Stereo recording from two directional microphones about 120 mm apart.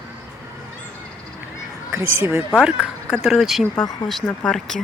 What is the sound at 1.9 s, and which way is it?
Speech, 20° right (ahead or behind).